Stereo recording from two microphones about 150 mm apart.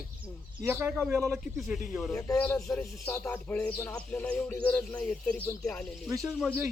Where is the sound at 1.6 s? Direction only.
Centre (ahead or behind).